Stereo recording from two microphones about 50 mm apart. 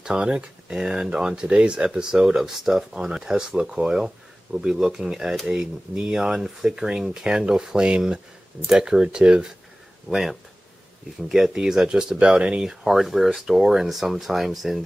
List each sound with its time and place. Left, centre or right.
0.0 s speech: centre
10.0 s speech: centre
12.6 s speech: centre